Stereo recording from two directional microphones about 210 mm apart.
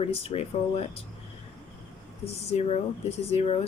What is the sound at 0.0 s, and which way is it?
Speech, 30° left (ahead or behind).